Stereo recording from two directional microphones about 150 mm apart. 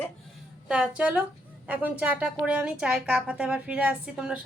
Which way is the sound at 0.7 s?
10° right (ahead or behind).